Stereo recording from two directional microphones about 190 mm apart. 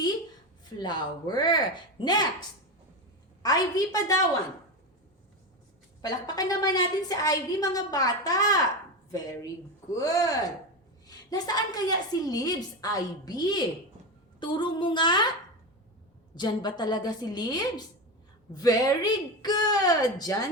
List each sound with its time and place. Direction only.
0.6 s a woman's voice: 25° left (ahead or behind)
3.4 s a woman's voice: 20° left (ahead or behind)
6.0 s a woman's voice: 20° left (ahead or behind)
9.9 s a woman's voice: 20° left (ahead or behind)
16.3 s a woman's voice: 25° left (ahead or behind)